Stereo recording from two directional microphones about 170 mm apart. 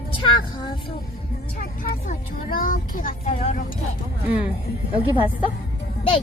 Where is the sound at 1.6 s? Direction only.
60° left (ahead or behind).